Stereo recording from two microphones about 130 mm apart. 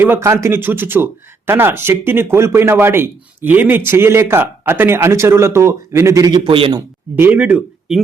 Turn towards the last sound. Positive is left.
turn(degrees=-5)  # may be behind; listen again after turning